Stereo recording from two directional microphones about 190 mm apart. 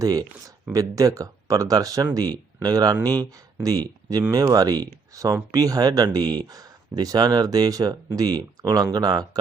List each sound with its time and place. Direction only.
0.0 s speech: 20° right (ahead or behind)